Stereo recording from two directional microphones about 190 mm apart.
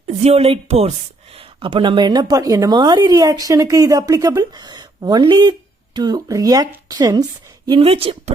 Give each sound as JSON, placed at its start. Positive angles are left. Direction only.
{"t": 0.2, "sound": "speech", "side_deg": -35}
{"t": 7.7, "sound": "speech", "side_deg": -30}